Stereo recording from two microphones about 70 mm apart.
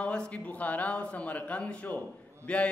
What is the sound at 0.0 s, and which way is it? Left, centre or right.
A man's voice, centre.